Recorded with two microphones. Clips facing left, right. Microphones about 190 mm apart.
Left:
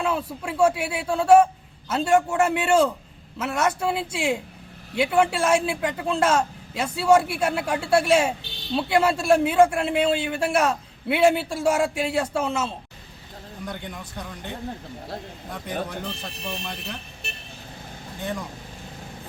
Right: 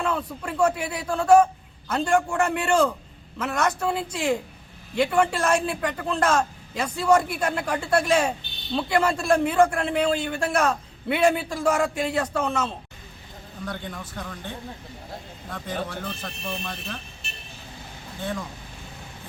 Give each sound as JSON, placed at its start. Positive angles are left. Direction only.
{"t": 0.0, "sound": "a man's voice", "side_deg": 10}
{"t": 17.2, "sound": "vehicle", "side_deg": 60}